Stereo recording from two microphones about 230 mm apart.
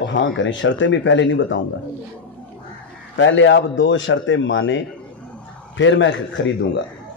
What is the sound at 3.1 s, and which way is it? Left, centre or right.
Speech, left.